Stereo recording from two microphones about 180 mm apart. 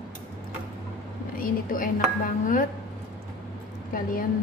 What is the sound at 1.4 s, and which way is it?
A woman's voice, 50° left (ahead or behind).